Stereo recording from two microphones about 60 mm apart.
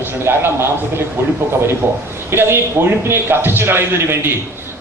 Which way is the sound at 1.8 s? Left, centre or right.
Right.